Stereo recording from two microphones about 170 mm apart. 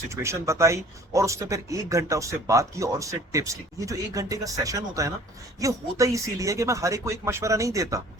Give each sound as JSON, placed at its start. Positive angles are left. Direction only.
{"t": 0.1, "sound": "speech", "side_deg": -15}